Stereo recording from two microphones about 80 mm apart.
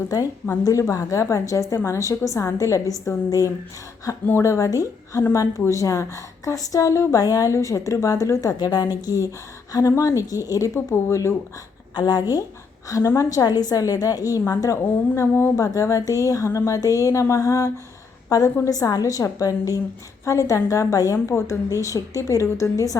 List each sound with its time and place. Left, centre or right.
0.1 s a woman's voice: left
8.5 s a woman's voice: left
11.9 s a woman's voice: left
12.9 s a woman's voice: left
13.4 s a woman's voice: left